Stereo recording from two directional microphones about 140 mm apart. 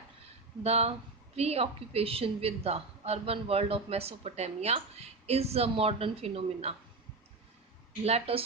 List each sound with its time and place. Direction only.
0.6 s a woman's voice: 45° right (ahead or behind)
8.0 s a woman's voice: 45° right (ahead or behind)